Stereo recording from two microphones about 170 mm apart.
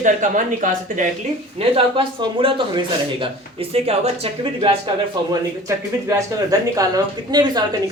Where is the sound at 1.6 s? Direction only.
30° right (ahead or behind).